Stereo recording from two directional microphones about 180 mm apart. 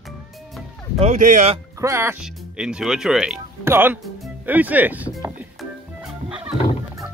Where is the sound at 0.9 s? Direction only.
40° right (ahead or behind).